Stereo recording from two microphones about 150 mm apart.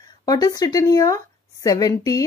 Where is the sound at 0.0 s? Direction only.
25° left (ahead or behind).